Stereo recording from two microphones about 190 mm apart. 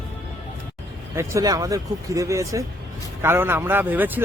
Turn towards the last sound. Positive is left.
turn(degrees=-10)  # may be behind; listen again after turning